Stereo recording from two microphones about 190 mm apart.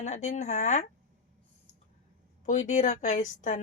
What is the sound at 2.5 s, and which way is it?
Speech, 40° left (ahead or behind).